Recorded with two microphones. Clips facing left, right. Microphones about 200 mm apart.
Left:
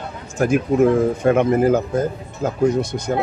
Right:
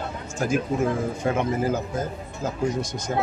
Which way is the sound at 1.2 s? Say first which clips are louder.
Left 7 dB; 60° left (ahead or behind).